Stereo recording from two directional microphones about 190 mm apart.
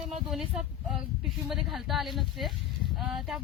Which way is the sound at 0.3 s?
Centre (ahead or behind).